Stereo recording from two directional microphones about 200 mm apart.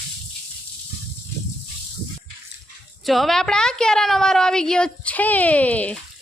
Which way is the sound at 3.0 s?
Centre (ahead or behind).